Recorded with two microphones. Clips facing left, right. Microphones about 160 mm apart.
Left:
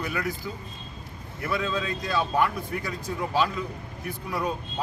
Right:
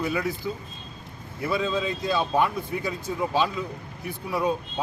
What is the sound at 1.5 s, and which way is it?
Speech, 20° right (ahead or behind).